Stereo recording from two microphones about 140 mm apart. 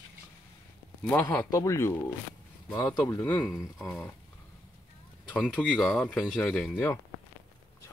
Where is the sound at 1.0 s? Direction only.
10° left (ahead or behind).